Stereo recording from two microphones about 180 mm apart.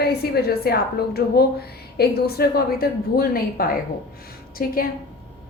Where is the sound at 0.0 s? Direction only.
60° left (ahead or behind).